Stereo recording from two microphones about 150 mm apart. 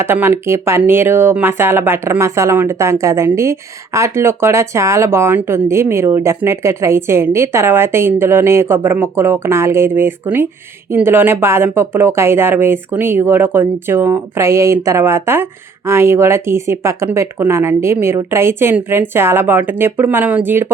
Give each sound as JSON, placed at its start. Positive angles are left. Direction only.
{"t": 0.0, "sound": "speech", "side_deg": -15}